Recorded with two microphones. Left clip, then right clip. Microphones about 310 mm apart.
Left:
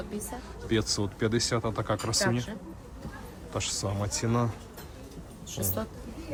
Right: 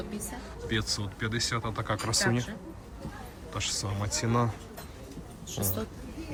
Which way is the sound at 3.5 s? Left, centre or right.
Centre.